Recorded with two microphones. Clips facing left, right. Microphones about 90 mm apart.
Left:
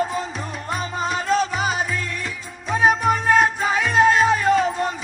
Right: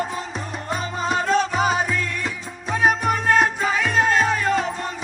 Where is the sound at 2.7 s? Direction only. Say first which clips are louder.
Left 2 dB; 5° left (ahead or behind).